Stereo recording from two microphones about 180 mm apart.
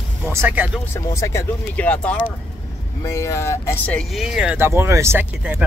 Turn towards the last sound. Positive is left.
turn(degrees=-10)  # may be behind; listen again after turning